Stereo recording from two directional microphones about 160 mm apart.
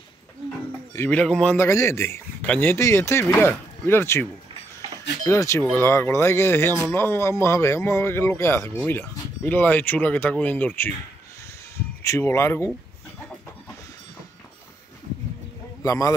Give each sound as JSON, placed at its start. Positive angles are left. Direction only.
{"t": 0.9, "sound": "speech", "side_deg": 10}
{"t": 12.0, "sound": "speech", "side_deg": 15}
{"t": 15.8, "sound": "a man's voice", "side_deg": 20}